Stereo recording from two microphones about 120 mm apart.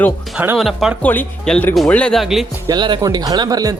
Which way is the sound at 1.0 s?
15° left (ahead or behind).